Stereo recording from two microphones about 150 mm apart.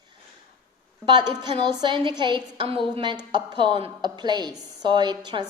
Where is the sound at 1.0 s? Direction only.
30° right (ahead or behind).